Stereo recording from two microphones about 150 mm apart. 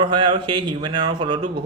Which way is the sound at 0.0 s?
30° right (ahead or behind).